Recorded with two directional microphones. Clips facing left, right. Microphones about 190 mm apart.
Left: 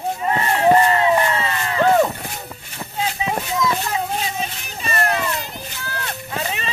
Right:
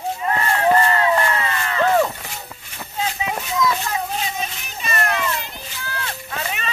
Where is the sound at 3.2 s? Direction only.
30° left (ahead or behind).